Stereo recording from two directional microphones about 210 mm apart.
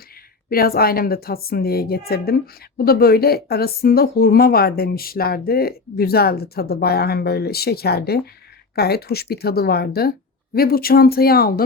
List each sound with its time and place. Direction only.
0.5 s a woman's voice: 45° left (ahead or behind)